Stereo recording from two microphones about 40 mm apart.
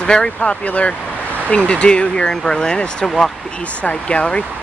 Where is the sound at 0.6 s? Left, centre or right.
Left; by 3.3 s centre.